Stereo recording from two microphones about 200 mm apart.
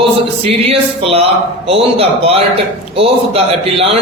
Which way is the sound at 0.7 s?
30° right (ahead or behind).